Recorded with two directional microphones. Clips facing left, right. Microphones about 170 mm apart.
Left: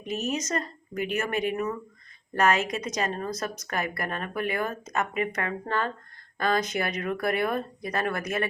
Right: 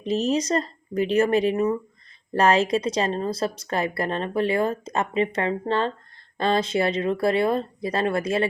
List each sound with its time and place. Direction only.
0.0 s speech: 30° right (ahead or behind)